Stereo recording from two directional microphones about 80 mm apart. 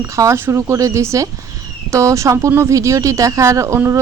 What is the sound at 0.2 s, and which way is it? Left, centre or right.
Speech, right.